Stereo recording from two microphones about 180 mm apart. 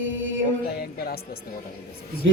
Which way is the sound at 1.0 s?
60° left (ahead or behind).